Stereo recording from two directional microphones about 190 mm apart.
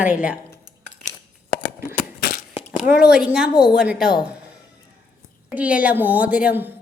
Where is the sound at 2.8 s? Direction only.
5° right (ahead or behind).